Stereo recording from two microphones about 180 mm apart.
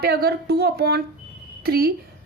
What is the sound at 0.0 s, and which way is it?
A woman's voice, 60° right (ahead or behind).